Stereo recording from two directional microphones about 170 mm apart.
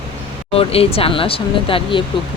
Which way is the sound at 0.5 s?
35° left (ahead or behind).